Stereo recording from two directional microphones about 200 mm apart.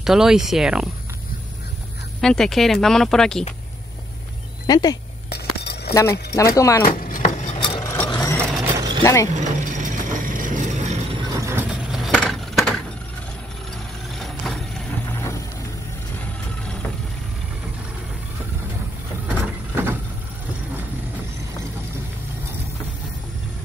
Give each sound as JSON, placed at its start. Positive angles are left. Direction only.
{"t": 0.0, "sound": "speech", "side_deg": 0}
{"t": 2.2, "sound": "speech", "side_deg": 0}
{"t": 4.6, "sound": "speech", "side_deg": 20}
{"t": 5.3, "sound": "a sound", "side_deg": 55}
{"t": 5.9, "sound": "speech", "side_deg": 15}
{"t": 6.9, "sound": "chopping", "side_deg": 45}
{"t": 7.5, "sound": "vehicle", "side_deg": 25}
{"t": 8.7, "sound": "mechanisms", "side_deg": -20}
{"t": 9.0, "sound": "speech", "side_deg": 15}
{"t": 9.3, "sound": "vehicle", "side_deg": -40}
{"t": 11.7, "sound": "a sound", "side_deg": -5}
{"t": 14.1, "sound": "vehicle", "side_deg": 0}
{"t": 19.2, "sound": "vehicle", "side_deg": -10}